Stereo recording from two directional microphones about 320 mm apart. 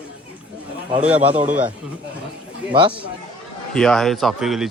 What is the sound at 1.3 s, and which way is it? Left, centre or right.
Speech, right.